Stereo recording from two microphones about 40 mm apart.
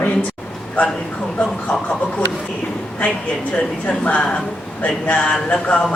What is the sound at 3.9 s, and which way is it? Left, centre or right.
A woman's voice, left.